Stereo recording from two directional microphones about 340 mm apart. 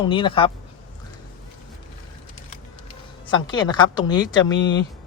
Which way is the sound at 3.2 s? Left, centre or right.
Centre.